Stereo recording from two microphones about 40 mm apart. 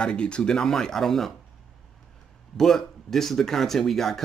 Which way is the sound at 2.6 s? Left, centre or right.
Centre.